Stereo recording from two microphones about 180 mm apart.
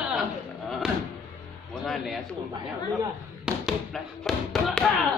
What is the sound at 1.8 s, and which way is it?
Bird, centre (ahead or behind).